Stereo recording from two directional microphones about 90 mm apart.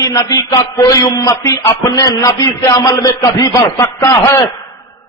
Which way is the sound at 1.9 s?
40° left (ahead or behind).